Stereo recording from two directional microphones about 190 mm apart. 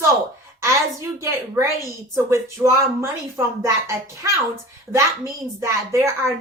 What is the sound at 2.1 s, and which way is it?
A man's voice, 15° right (ahead or behind).